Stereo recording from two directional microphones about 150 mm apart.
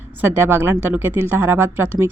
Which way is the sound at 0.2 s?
15° right (ahead or behind).